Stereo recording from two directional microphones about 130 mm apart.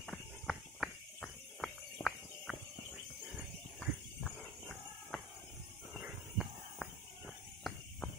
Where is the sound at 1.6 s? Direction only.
Centre (ahead or behind).